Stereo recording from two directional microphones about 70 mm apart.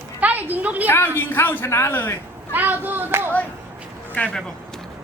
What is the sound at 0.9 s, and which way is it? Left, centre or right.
A woman's voice, left.